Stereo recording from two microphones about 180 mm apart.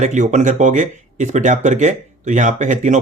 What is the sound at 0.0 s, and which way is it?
Speech, 40° right (ahead or behind).